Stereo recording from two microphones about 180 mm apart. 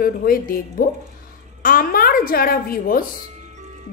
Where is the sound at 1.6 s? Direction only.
50° left (ahead or behind).